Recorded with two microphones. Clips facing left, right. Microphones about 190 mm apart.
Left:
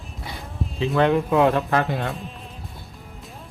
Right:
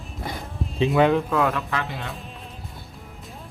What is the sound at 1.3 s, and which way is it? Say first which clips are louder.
Speech: left 5 dB; 25° left (ahead or behind).